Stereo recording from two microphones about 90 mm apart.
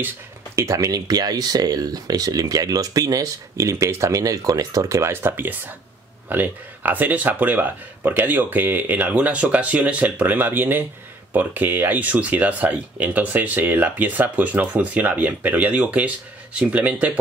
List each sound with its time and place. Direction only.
0.6 s speech: 40° right (ahead or behind); by 17.1 s 15° right (ahead or behind)